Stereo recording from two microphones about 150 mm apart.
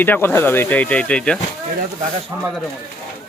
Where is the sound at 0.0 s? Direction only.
10° left (ahead or behind).